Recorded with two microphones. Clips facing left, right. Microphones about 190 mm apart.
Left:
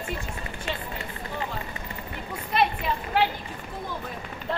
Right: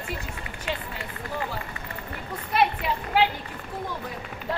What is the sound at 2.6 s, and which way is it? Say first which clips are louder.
Speech: right 1 dB; 10° right (ahead or behind).